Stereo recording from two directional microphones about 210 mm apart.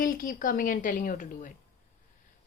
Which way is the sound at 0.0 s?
40° left (ahead or behind).